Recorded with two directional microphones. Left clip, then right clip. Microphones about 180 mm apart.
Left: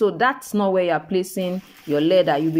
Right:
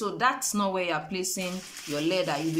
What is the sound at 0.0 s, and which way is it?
Speech, 40° left (ahead or behind).